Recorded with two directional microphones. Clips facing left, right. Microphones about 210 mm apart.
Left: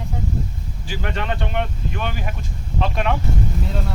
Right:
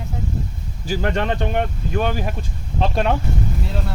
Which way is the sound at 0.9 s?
45° right (ahead or behind).